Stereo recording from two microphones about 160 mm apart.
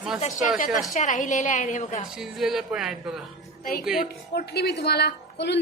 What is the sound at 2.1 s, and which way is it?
Speech, centre (ahead or behind).